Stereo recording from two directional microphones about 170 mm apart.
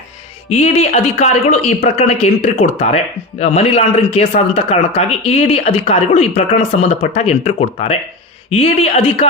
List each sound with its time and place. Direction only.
0.4 s speech: 40° left (ahead or behind)